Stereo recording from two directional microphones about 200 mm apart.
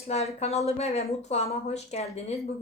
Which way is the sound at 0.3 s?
30° left (ahead or behind).